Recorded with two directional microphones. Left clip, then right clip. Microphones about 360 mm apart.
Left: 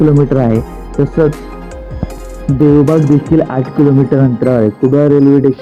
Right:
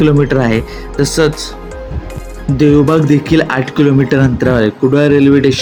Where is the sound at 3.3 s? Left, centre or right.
Centre.